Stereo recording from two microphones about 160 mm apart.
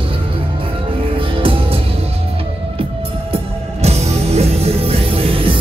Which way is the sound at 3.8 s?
40° right (ahead or behind).